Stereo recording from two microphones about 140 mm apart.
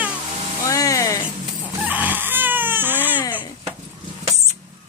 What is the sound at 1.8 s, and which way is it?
Baby cry, 10° right (ahead or behind).